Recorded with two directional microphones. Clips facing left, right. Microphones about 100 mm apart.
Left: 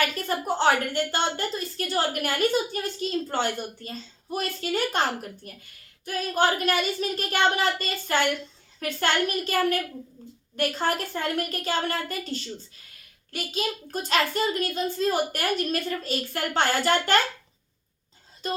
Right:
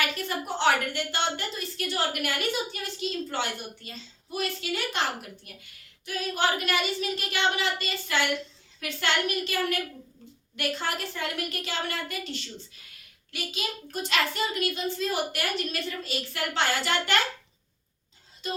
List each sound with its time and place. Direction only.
0.0 s a woman's voice: 40° left (ahead or behind)
18.4 s speech: 45° left (ahead or behind)